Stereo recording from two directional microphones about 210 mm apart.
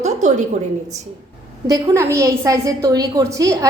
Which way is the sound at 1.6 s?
15° right (ahead or behind).